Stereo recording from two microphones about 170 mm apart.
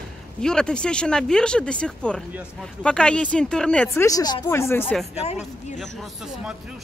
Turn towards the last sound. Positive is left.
turn(degrees=0)  # may be behind; listen again after turning